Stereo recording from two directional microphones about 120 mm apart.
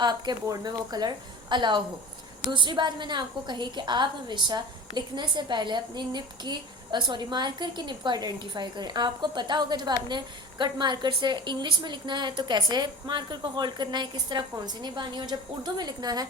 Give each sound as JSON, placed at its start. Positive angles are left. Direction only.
{"t": 0.0, "sound": "a woman's voice", "side_deg": -35}